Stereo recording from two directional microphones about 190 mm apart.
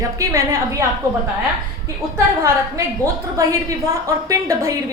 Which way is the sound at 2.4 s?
15° right (ahead or behind).